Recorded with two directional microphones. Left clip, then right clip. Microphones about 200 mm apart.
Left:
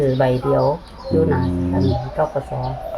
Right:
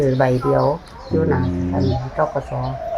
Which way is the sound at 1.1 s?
10° left (ahead or behind).